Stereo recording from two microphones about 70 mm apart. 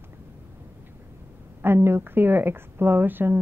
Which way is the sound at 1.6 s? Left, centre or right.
Right.